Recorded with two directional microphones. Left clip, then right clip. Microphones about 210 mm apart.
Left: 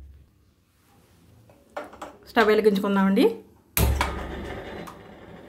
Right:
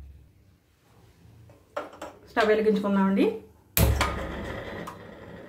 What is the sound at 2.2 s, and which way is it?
Speech, 55° left (ahead or behind).